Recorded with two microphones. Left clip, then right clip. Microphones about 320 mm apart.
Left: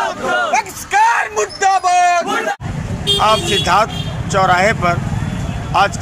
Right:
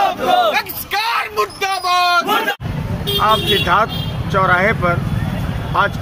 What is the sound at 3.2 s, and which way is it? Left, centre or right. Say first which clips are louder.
Speech: right 1 dB; centre.